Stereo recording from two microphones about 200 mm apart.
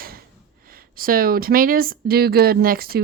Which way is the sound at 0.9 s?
45° right (ahead or behind).